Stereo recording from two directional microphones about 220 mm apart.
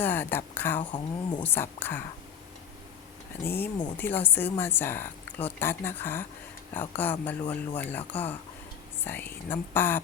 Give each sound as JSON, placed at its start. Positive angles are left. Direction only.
{"t": 0.0, "sound": "speech", "side_deg": 10}
{"t": 0.8, "sound": "speech", "side_deg": 20}
{"t": 1.4, "sound": "speech", "side_deg": 10}
{"t": 3.4, "sound": "speech", "side_deg": 10}